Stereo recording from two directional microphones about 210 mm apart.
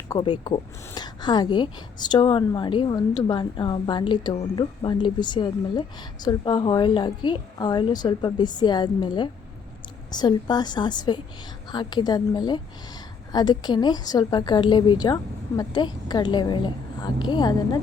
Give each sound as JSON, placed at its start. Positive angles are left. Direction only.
{"t": 0.1, "sound": "a woman's voice", "side_deg": 20}